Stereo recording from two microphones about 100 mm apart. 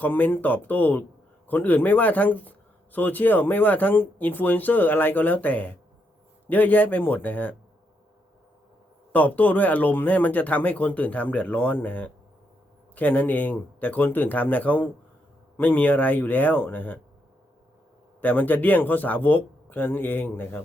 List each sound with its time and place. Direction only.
0.0 s speech: 20° left (ahead or behind)
9.1 s speech: 15° left (ahead or behind)
18.2 s speech: 15° left (ahead or behind)